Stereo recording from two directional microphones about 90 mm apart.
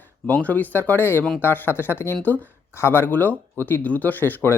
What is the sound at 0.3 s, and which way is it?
Speech, 15° left (ahead or behind).